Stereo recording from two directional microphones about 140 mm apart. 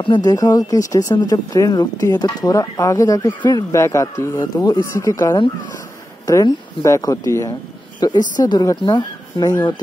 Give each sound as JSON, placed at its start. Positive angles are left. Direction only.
{"t": 0.0, "sound": "speech", "side_deg": 30}